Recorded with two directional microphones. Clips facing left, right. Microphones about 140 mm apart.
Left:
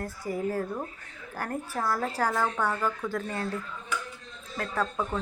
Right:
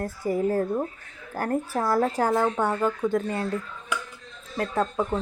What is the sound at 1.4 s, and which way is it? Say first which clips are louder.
Speech: right 6 dB; 40° right (ahead or behind).